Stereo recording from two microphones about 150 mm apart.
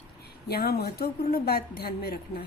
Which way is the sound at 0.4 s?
90° left.